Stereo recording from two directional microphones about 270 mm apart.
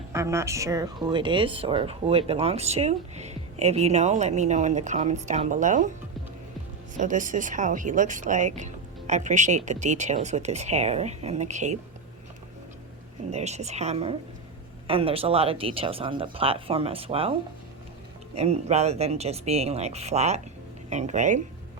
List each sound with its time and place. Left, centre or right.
0.1 s speech: centre; by 5.9 s right
6.9 s speech: right
13.3 s speech: right
18.3 s speech: right